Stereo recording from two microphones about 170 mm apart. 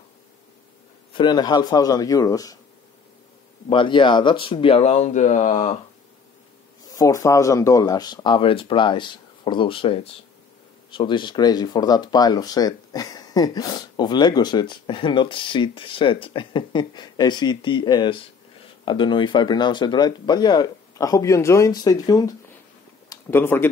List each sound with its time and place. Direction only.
1.1 s speech: 25° left (ahead or behind)
3.6 s speech: 30° left (ahead or behind)
6.9 s speech: 20° left (ahead or behind)